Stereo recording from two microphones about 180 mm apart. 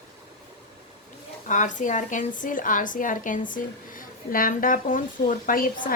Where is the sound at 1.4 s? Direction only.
45° left (ahead or behind).